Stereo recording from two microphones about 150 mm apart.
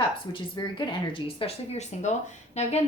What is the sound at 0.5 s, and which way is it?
Speech, 30° left (ahead or behind).